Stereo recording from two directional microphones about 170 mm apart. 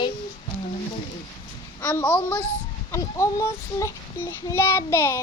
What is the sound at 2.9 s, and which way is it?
Child singing, 15° left (ahead or behind).